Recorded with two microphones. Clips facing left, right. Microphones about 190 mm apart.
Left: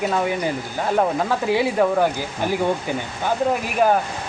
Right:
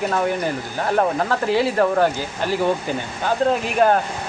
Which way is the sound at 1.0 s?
15° left (ahead or behind).